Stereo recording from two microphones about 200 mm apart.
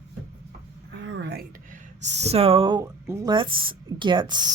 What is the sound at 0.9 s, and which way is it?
Speech, 65° right (ahead or behind).